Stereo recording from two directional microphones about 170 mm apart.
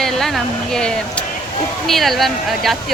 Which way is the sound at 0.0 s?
Centre (ahead or behind).